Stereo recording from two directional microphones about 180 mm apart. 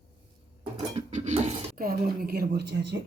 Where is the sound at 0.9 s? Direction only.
40° right (ahead or behind).